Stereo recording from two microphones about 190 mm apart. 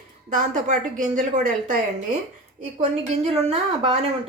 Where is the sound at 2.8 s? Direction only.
35° right (ahead or behind).